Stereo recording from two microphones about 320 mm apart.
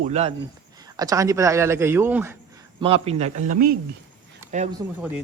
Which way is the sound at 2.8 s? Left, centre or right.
Centre.